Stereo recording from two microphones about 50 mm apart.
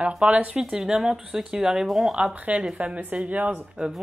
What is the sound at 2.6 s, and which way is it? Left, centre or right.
Speech, right.